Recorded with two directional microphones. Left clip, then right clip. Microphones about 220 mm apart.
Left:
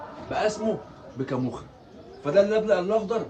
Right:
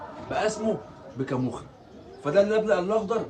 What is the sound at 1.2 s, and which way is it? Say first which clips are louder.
Speech: even; 5° left (ahead or behind).